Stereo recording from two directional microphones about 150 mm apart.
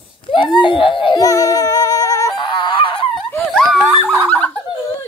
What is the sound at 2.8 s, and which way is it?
Goose, 35° left (ahead or behind).